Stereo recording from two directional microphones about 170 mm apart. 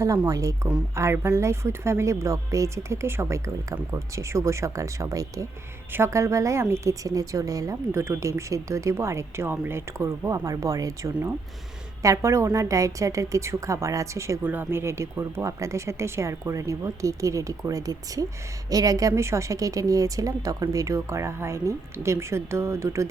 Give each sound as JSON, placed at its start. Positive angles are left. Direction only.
{"t": 0.3, "sound": "a woman's voice", "side_deg": -20}